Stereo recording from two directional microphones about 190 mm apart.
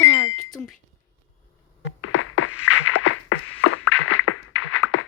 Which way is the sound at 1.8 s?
90° left.